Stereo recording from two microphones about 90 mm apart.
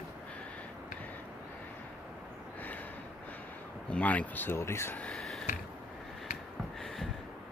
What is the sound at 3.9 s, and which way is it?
Speech, 15° left (ahead or behind).